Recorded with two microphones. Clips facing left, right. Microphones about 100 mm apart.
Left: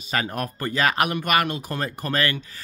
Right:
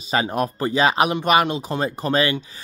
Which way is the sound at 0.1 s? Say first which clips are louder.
Right 5 dB; 20° right (ahead or behind).